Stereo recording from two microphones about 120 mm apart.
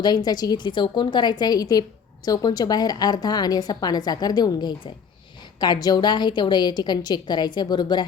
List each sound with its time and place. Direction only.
0.0 s a woman's voice: 35° left (ahead or behind)